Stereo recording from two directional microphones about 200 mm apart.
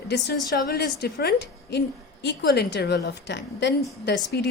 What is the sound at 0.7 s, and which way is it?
A woman's voice, 55° left (ahead or behind).